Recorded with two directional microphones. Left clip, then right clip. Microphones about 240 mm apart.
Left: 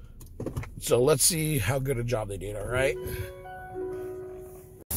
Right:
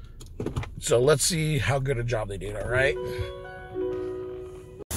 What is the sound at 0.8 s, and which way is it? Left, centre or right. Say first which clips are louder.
Speech: right 2 dB; left.